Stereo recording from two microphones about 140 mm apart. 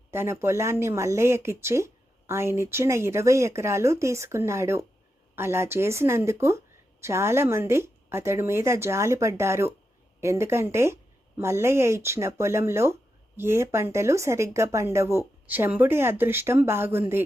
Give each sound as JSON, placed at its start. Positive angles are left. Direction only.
{"t": 0.1, "sound": "a woman's voice", "side_deg": -15}